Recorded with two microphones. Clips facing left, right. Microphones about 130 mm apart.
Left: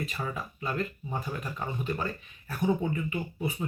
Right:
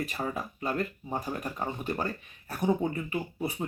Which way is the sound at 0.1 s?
40° right (ahead or behind).